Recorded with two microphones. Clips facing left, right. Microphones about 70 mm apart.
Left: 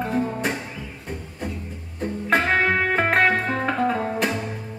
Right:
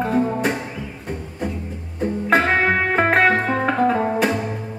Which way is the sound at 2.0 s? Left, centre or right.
Centre.